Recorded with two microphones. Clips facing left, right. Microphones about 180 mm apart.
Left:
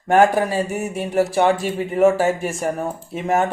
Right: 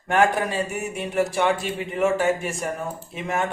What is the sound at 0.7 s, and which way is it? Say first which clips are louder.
Speech: left 5 dB; 35° left (ahead or behind).